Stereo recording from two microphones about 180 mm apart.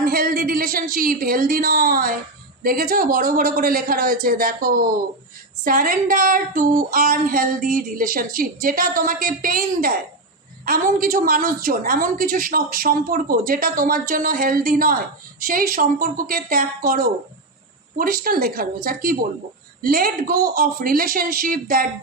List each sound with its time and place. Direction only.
0.0 s a woman's voice: 55° right (ahead or behind)